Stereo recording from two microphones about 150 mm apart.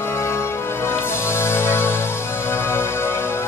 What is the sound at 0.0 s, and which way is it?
Music, 15° left (ahead or behind).